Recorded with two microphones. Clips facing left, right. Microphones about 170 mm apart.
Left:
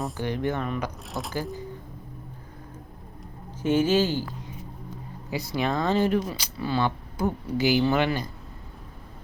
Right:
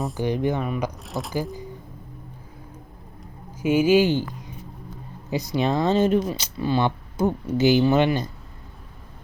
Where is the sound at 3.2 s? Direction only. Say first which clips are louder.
Right 3 dB; 10° right (ahead or behind).